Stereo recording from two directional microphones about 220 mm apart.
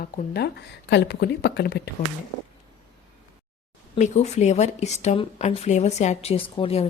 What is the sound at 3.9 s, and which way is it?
A woman's voice, 30° left (ahead or behind).